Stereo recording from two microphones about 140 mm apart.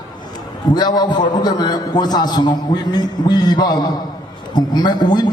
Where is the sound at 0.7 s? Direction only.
30° left (ahead or behind).